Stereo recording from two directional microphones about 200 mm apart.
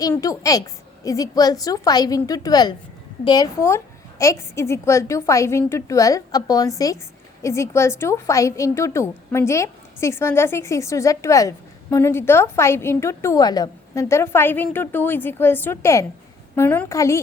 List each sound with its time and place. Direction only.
0.0 s a woman's voice: 15° left (ahead or behind)